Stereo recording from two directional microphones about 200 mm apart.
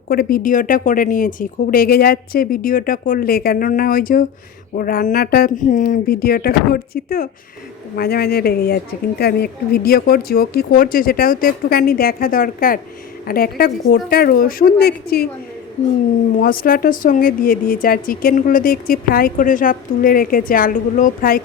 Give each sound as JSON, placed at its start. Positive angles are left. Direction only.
{"t": 0.1, "sound": "a woman's voice", "side_deg": 50}
{"t": 16.4, "sound": "a woman's voice", "side_deg": 45}